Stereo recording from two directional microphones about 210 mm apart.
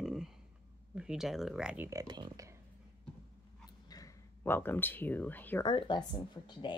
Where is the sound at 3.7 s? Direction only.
15° left (ahead or behind).